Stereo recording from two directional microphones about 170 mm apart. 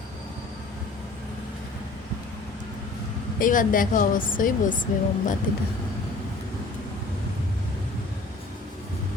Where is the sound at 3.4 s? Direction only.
50° left (ahead or behind).